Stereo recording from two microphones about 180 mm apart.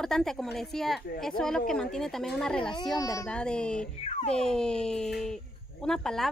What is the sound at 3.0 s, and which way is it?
Speech, 15° left (ahead or behind).